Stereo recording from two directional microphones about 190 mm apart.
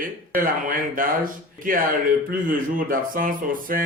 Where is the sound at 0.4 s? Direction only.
45° right (ahead or behind).